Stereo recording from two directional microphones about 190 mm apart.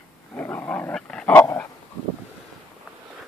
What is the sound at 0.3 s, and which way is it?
Dog, 10° left (ahead or behind).